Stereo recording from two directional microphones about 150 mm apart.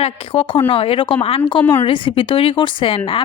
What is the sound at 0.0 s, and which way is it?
A woman's voice, 40° left (ahead or behind).